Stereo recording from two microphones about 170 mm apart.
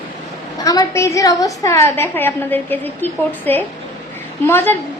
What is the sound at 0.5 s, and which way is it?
A woman's voice, 20° left (ahead or behind).